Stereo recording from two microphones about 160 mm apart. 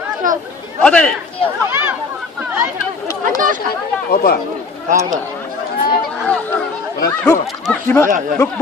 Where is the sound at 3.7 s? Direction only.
70° left (ahead or behind).